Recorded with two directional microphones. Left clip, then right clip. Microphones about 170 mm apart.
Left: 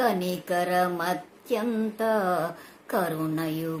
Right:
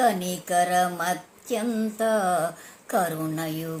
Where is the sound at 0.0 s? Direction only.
10° left (ahead or behind).